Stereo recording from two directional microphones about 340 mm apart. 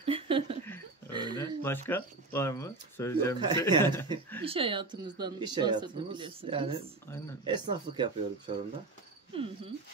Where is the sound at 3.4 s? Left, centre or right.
Centre.